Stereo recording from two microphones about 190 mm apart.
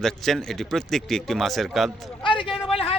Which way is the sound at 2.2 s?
25° left (ahead or behind).